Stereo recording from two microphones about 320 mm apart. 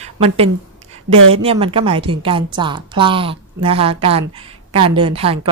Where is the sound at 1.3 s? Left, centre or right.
Centre.